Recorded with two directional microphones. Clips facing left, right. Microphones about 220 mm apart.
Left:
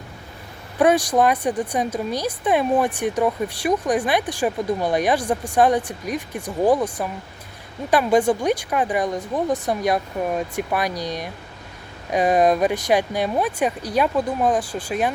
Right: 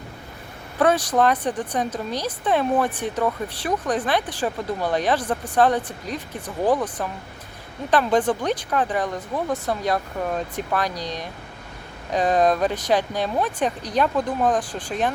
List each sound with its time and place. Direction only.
0.8 s speech: 15° left (ahead or behind)